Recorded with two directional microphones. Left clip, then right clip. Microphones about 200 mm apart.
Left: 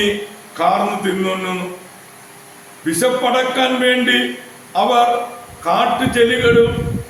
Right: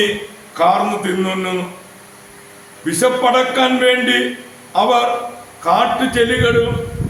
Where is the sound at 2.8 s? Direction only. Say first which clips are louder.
Right 2 dB; 10° right (ahead or behind).